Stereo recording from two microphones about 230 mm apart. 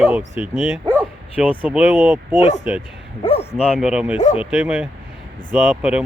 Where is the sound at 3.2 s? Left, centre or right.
Left.